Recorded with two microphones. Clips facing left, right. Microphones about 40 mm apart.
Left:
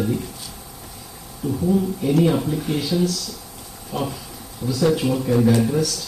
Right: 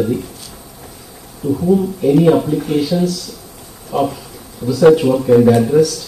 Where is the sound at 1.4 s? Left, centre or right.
Right.